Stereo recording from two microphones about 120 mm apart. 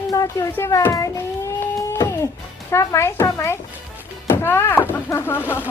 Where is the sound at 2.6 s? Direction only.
20° left (ahead or behind).